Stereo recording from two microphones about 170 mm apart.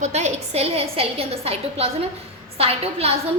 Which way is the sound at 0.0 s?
40° right (ahead or behind).